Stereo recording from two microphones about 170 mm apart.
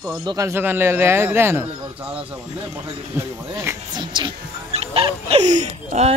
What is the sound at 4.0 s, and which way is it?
Music, 25° right (ahead or behind).